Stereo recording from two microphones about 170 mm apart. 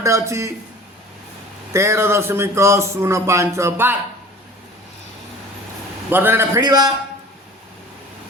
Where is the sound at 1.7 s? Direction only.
15° right (ahead or behind).